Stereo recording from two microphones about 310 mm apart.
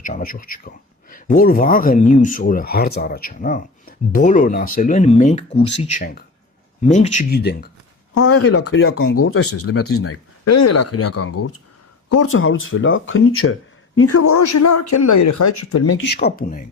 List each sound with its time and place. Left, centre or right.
0.0 s speech: left
8.1 s speech: left
16.0 s speech: left